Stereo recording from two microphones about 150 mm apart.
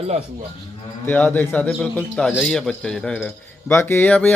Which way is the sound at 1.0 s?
10° left (ahead or behind).